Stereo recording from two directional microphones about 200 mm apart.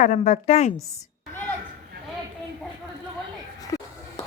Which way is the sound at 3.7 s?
15° left (ahead or behind).